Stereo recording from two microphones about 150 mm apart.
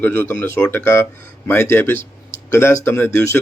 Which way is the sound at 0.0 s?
15° left (ahead or behind).